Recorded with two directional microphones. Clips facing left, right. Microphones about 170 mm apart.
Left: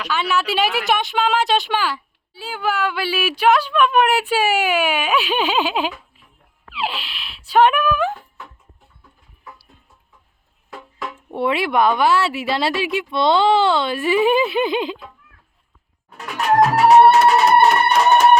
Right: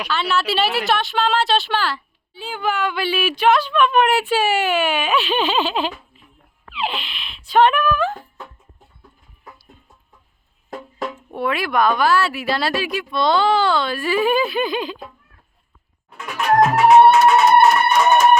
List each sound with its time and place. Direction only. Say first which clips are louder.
0.1 s speech: left 1 dB; 10° left (ahead or behind)
11.3 s speech: left 3 dB; 25° left (ahead or behind)
16.1 s music: even; 35° left (ahead or behind)